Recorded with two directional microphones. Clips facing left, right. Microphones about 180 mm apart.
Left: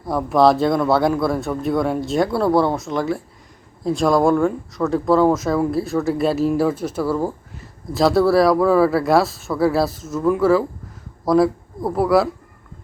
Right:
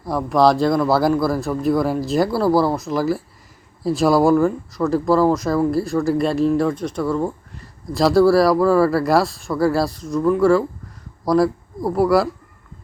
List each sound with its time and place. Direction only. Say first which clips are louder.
0.0 s speech: left 1 dB; centre (ahead or behind)